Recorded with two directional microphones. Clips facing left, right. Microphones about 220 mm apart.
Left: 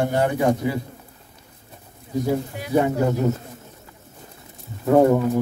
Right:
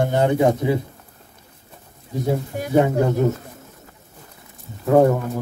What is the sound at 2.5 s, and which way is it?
Speech, 45° right (ahead or behind).